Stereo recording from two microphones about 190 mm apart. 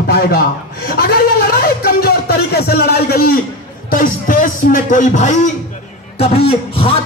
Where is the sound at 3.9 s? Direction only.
45° left (ahead or behind); by 7.0 s 30° left (ahead or behind).